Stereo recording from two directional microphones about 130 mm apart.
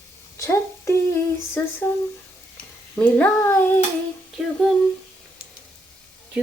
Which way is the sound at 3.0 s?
10° left (ahead or behind).